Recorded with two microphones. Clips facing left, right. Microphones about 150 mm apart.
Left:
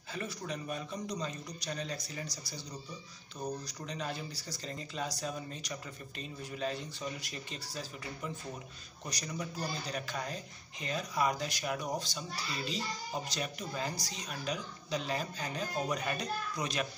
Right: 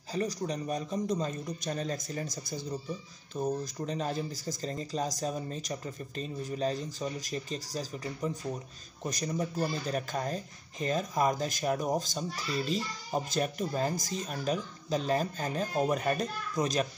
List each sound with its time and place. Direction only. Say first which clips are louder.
0.1 s speech: right 7 dB; 40° right (ahead or behind)